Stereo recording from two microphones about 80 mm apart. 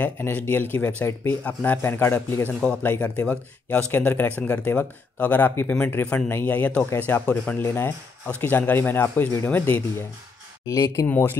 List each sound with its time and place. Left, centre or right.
0.2 s speech: left
2.8 s speech: left
10.7 s speech: left
11.1 s speech: left